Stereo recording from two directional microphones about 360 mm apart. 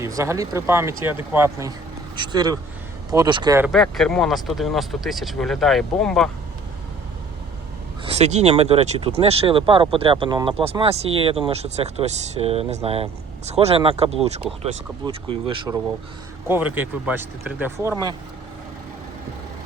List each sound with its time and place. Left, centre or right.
0.0 s speech: centre
8.0 s speech: centre